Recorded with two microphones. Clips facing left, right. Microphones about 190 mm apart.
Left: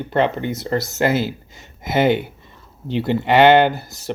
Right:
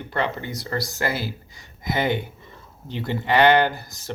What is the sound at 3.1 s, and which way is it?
Speech, 20° left (ahead or behind).